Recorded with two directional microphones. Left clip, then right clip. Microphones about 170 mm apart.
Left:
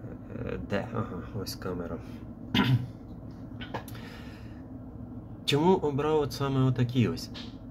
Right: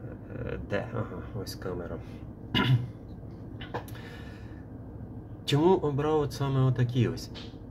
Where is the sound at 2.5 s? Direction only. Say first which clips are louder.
Even; 15° left (ahead or behind).